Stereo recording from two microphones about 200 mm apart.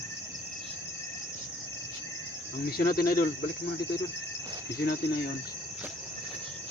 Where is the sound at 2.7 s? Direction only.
45° left (ahead or behind).